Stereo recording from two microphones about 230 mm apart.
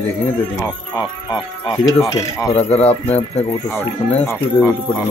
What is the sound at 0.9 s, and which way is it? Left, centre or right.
Speech, centre.